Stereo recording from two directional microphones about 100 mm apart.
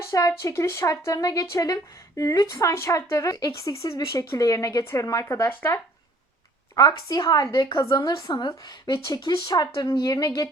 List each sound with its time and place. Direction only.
0.0 s a woman's voice: 35° left (ahead or behind)
6.7 s a woman's voice: 40° left (ahead or behind)